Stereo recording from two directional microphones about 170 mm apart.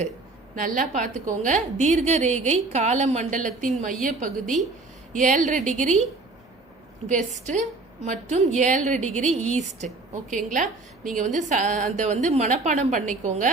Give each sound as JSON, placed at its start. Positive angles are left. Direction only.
{"t": 0.5, "sound": "a woman's voice", "side_deg": -50}
{"t": 7.1, "sound": "a woman's voice", "side_deg": -45}